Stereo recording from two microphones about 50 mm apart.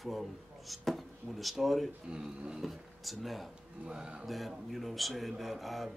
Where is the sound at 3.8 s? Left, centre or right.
Centre.